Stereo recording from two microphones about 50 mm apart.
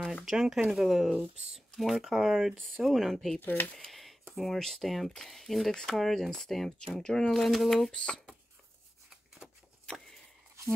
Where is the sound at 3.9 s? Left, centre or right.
Centre.